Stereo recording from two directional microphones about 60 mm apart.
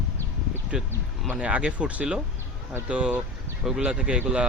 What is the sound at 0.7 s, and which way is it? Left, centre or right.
Speech, centre.